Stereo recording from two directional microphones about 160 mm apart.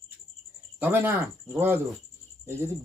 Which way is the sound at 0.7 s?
10° right (ahead or behind).